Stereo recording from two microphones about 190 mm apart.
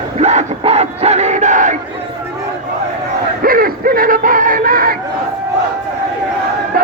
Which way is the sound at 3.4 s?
50° right (ahead or behind).